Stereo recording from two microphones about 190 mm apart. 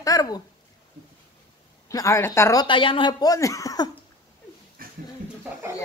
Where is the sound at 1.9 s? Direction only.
15° left (ahead or behind).